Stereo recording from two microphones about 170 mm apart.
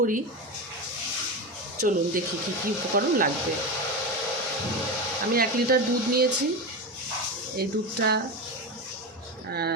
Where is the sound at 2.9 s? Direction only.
55° right (ahead or behind).